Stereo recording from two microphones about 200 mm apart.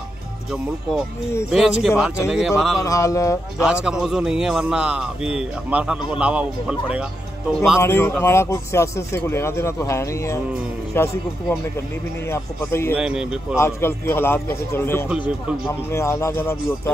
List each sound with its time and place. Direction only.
1.5 s a man's voice: 5° right (ahead or behind)
2.8 s speech: 15° left (ahead or behind)
3.6 s a man's voice: 5° right (ahead or behind)
7.8 s speech: 10° left (ahead or behind)
12.3 s speech: 10° left (ahead or behind)
12.9 s a man's voice: 5° right (ahead or behind)
13.6 s speech: 15° left (ahead or behind)